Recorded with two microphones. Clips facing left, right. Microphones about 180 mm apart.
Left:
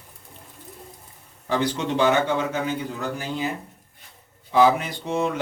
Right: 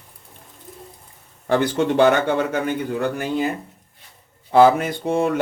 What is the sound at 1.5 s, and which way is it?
A man's voice, 55° right (ahead or behind).